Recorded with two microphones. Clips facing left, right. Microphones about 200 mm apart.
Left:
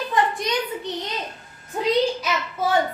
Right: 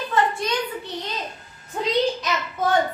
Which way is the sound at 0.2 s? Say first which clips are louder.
Even; 15° left (ahead or behind).